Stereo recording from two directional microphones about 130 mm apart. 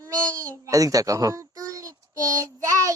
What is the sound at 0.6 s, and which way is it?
Child singing, 25° right (ahead or behind).